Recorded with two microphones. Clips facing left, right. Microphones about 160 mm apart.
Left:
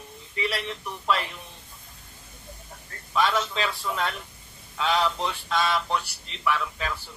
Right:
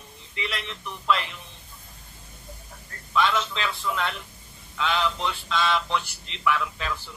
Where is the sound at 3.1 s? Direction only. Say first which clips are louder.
Even; 40° left (ahead or behind).